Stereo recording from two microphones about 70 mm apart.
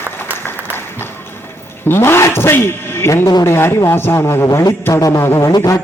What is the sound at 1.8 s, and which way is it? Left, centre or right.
A man's voice, left.